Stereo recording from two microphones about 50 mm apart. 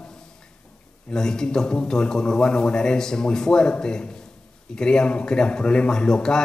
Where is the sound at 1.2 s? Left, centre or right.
Centre.